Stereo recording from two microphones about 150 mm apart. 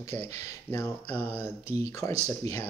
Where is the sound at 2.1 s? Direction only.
45° right (ahead or behind).